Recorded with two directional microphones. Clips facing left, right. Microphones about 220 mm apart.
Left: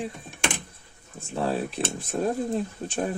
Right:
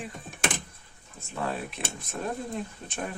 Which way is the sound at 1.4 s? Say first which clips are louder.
Left 6 dB; 30° left (ahead or behind).